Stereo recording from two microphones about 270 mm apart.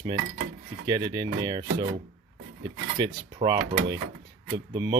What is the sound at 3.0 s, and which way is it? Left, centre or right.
Speech, centre.